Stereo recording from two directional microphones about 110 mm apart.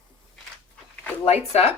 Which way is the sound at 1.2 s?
70° left (ahead or behind).